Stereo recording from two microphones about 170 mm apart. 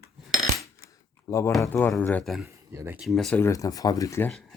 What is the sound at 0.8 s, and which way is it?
Keys jangling, 60° left (ahead or behind).